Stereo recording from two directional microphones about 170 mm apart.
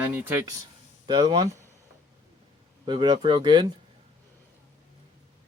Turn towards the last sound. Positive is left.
turn(degrees=-25)  # may be behind; listen again after turning